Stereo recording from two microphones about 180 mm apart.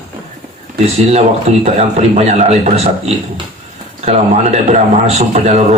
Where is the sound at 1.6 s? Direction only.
35° right (ahead or behind).